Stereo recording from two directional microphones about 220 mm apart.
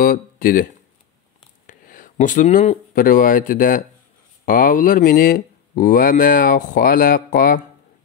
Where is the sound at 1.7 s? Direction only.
35° left (ahead or behind).